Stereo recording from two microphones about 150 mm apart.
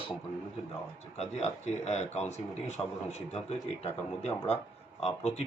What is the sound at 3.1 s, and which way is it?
Speech, 45° left (ahead or behind).